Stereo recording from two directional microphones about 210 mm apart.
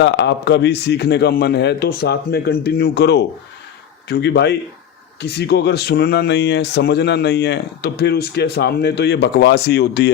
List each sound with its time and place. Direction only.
0.0 s speech: 55° left (ahead or behind)